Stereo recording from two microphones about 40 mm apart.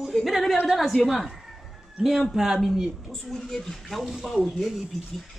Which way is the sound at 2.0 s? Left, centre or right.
Right.